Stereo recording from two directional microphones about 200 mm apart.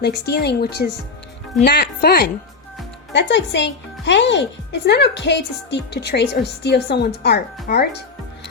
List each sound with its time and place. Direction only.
0.0 s a woman's voice: 55° left (ahead or behind)
3.1 s a woman's voice: 60° left (ahead or behind)